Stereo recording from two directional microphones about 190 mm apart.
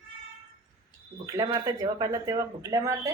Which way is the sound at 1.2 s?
20° right (ahead or behind).